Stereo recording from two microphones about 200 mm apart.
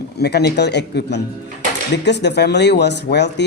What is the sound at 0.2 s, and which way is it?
Speech, 55° left (ahead or behind).